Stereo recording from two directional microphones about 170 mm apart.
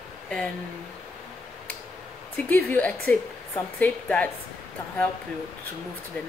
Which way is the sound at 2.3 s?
10° left (ahead or behind).